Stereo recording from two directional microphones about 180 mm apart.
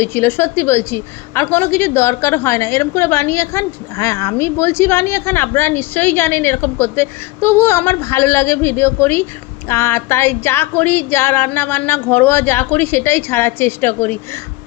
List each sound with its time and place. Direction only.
0.0 s a woman's voice: 15° left (ahead or behind)